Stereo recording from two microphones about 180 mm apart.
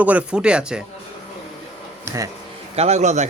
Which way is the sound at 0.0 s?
5° right (ahead or behind).